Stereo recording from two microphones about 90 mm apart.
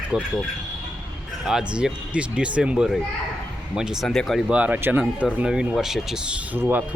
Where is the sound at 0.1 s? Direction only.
10° right (ahead or behind).